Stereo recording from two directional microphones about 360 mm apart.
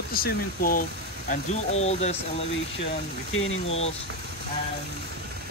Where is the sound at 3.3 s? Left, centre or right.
Left.